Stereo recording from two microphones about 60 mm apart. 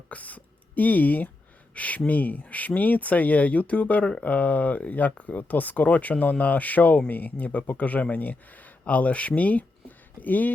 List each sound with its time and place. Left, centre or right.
0.1 s speech: left